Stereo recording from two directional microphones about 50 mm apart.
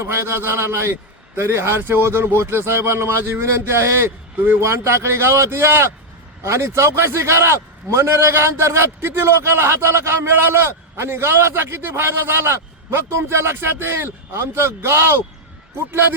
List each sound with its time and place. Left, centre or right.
0.0 s a man's voice: right
3.4 s a man's voice: right
6.4 s a man's voice: right